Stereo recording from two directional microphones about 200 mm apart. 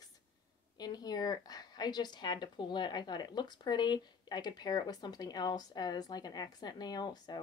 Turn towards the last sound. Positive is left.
turn(degrees=20)  # may be behind; listen again after turning